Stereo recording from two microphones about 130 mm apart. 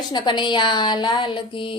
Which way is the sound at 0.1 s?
35° left (ahead or behind).